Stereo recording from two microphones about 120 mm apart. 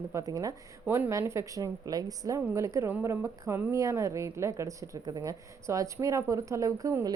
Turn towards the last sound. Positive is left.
turn(degrees=-25)  # may be behind; listen again after turning